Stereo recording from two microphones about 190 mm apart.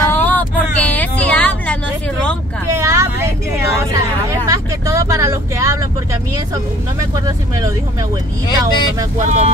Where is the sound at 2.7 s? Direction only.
15° right (ahead or behind).